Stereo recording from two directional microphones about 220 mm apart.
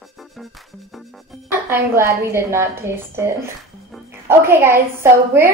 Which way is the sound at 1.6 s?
10° right (ahead or behind).